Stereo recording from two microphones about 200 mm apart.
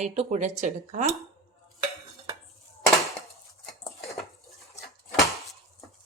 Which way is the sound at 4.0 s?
Centre (ahead or behind).